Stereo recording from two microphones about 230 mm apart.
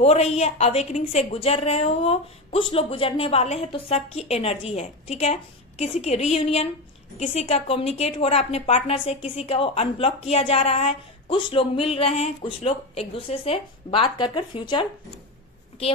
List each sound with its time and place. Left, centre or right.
0.0 s speech: left